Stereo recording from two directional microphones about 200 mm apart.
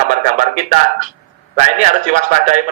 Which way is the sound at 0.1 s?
40° right (ahead or behind).